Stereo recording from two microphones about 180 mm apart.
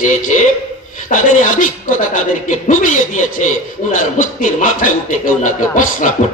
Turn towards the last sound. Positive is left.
turn(degrees=45)  # may be behind; listen again after turning